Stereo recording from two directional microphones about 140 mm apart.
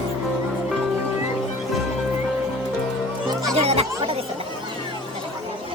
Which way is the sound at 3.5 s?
45° right (ahead or behind).